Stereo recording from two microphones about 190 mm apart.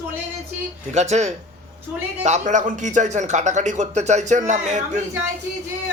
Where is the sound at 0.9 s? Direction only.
35° right (ahead or behind).